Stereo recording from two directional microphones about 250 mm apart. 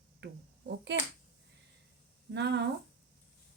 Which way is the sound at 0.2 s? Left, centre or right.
Right.